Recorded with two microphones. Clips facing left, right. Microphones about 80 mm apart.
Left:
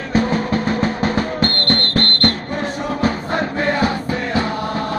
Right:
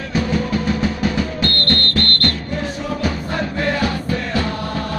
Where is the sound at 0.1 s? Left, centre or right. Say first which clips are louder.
Left 2 dB; left.